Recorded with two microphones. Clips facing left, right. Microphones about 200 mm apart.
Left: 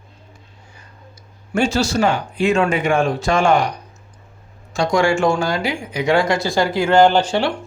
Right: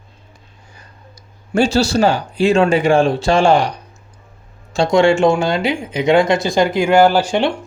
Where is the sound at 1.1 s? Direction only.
35° right (ahead or behind); by 7.3 s 5° right (ahead or behind).